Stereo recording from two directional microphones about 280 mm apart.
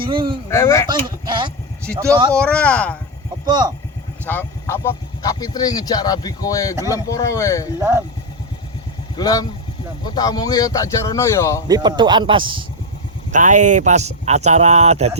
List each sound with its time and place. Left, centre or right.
0.0 s a man's voice: centre
0.5 s speech: centre
0.9 s a man's voice: centre
2.3 s speech: centre
3.4 s speech: centre
4.3 s speech: centre
7.8 s a man's voice: centre
9.1 s speech: centre
11.7 s a man's voice: centre